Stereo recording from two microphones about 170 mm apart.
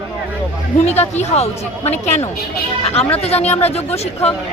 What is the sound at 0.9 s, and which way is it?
Speech, 40° left (ahead or behind).